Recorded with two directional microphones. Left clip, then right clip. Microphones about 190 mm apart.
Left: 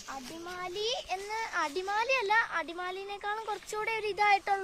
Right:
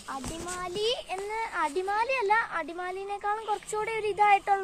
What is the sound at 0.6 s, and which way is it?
Speech, 60° left (ahead or behind).